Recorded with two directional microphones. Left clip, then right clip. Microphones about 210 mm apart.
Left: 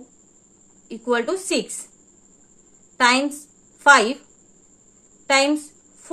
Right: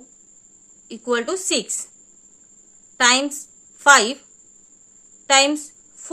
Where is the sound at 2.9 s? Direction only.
15° right (ahead or behind).